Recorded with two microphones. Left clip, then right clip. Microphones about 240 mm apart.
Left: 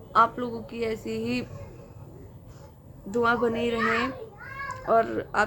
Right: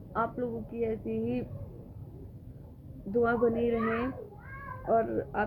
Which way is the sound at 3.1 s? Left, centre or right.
Centre.